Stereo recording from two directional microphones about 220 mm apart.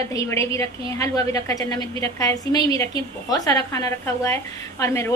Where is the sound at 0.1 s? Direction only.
15° left (ahead or behind).